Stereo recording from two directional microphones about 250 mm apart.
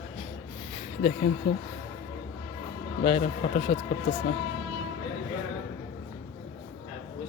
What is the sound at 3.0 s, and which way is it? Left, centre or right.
Speech, left.